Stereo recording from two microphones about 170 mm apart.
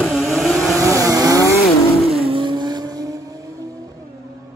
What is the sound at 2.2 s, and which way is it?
Vehicle, 30° right (ahead or behind).